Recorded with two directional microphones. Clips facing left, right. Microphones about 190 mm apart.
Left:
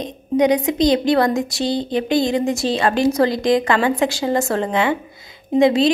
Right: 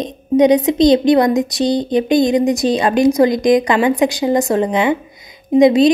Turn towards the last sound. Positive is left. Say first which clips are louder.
# right 5 dB
turn(degrees=-15)  # may be behind; listen again after turning